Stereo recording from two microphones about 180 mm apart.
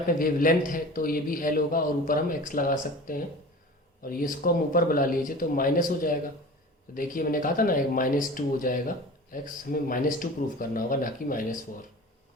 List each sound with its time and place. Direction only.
0.2 s a man's voice: 50° left (ahead or behind)